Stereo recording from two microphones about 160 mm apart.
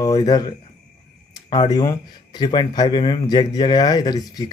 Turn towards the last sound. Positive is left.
turn(degrees=25)  # may be behind; listen again after turning